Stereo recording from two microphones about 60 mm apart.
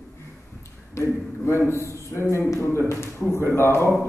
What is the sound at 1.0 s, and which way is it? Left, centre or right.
A man's voice, left.